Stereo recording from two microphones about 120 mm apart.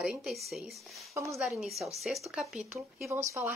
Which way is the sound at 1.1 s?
25° right (ahead or behind).